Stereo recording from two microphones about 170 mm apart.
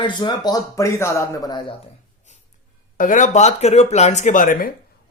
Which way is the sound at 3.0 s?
50° left (ahead or behind).